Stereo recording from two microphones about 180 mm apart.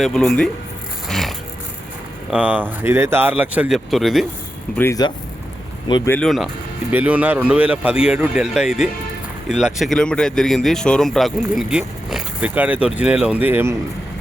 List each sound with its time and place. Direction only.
0.0 s speech: 5° left (ahead or behind)
1.0 s music: centre (ahead or behind)
2.3 s speech: 10° right (ahead or behind)
4.8 s speech: 20° left (ahead or behind)
6.1 s speech: 5° left (ahead or behind); by 13.7 s 10° right (ahead or behind)